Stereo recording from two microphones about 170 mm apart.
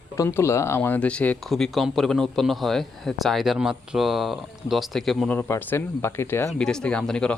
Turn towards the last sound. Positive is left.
turn(degrees=5)  # may be behind; listen again after turning